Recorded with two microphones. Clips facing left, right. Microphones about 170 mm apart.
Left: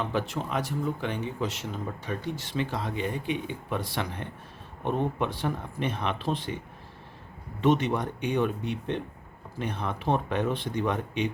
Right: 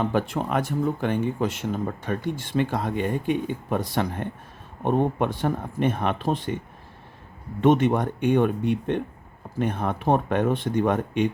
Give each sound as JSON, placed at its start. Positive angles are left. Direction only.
{"t": 0.0, "sound": "speech", "side_deg": -50}
{"t": 7.6, "sound": "speech", "side_deg": -50}